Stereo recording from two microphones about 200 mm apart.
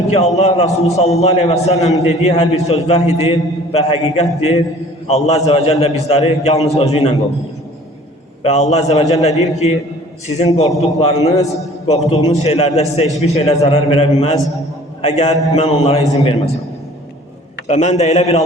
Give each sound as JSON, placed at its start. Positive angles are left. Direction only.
{"t": 0.1, "sound": "a man's voice", "side_deg": 30}
{"t": 8.4, "sound": "a man's voice", "side_deg": 35}
{"t": 17.7, "sound": "a man's voice", "side_deg": 35}